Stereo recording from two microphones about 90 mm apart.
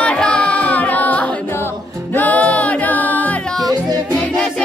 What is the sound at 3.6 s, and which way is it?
Music, 45° right (ahead or behind).